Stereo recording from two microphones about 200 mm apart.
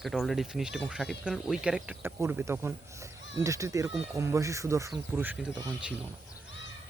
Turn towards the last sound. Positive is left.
turn(degrees=-5)  # may be behind; listen again after turning